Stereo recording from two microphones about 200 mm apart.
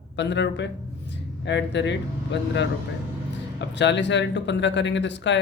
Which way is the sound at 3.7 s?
60° left (ahead or behind).